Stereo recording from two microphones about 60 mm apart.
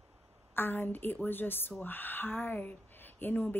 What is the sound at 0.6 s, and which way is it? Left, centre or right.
A woman's voice, left.